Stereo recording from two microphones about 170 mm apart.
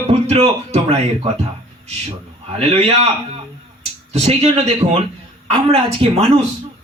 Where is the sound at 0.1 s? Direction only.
35° right (ahead or behind).